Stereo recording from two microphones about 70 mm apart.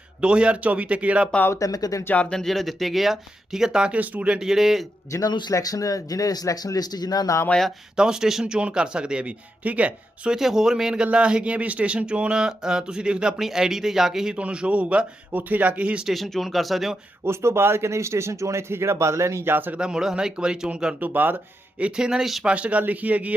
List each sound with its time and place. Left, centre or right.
0.2 s speech: centre
1.5 s speech: left
2.1 s speech: centre; by 4.4 s right
4.4 s speech: centre
5.1 s speech: left
5.5 s speech: left
7.5 s speech: centre
7.9 s speech: centre
10.3 s speech: centre
16.0 s speech: centre
17.2 s speech: right
19.8 s speech: centre
21.0 s speech: right; by 22.4 s centre
22.4 s speech: centre